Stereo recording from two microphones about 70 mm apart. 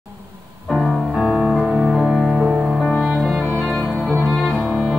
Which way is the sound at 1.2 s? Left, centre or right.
Centre.